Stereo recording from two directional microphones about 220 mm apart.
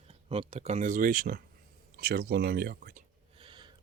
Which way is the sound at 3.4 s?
20° right (ahead or behind).